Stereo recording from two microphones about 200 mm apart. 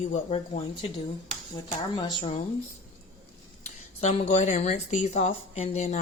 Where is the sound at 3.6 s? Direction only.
30° left (ahead or behind).